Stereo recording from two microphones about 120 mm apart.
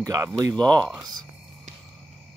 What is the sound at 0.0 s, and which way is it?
Speech, 30° right (ahead or behind).